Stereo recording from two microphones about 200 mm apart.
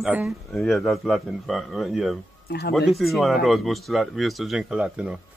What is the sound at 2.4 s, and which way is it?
Speech, 50° left (ahead or behind).